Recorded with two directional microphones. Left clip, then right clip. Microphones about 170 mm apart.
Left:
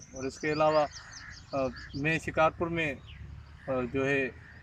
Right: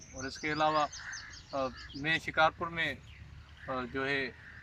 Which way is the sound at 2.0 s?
30° left (ahead or behind).